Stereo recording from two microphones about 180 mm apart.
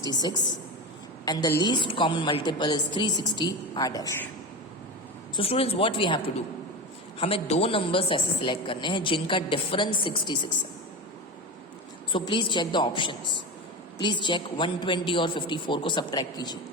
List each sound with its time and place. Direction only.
0.0 s a woman's voice: 20° left (ahead or behind)
5.4 s a woman's voice: 30° left (ahead or behind)
12.1 s a woman's voice: 25° left (ahead or behind)